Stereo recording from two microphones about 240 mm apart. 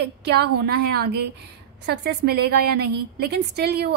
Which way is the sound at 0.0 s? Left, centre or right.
Right.